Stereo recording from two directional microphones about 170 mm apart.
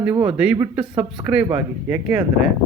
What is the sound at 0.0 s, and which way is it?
Speech, 15° right (ahead or behind).